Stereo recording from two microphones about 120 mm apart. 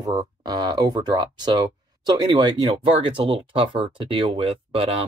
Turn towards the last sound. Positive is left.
turn(degrees=-50)  # may be behind; listen again after turning